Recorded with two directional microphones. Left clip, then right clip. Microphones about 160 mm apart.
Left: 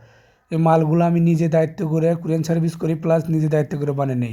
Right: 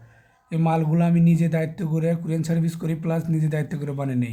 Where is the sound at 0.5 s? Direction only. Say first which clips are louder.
Left 7 dB; 30° left (ahead or behind).